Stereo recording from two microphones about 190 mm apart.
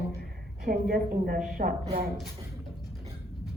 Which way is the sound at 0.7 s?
55° right (ahead or behind).